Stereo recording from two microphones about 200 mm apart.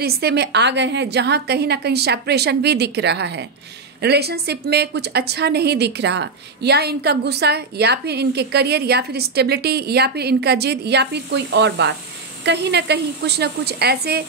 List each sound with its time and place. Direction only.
0.0 s a woman's voice: 55° right (ahead or behind)